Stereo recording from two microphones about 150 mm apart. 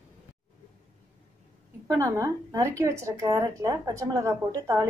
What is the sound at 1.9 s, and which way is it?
Speech, 20° right (ahead or behind).